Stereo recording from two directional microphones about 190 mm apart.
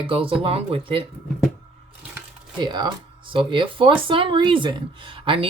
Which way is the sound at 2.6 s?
20° right (ahead or behind).